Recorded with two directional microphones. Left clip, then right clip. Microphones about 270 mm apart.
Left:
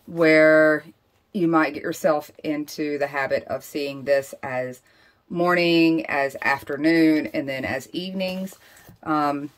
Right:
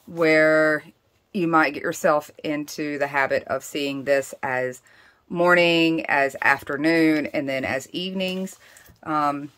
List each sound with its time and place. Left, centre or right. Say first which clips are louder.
0.2 s speech: left 2 dB; centre